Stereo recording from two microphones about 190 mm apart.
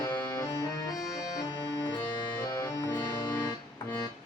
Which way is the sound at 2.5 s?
15° left (ahead or behind).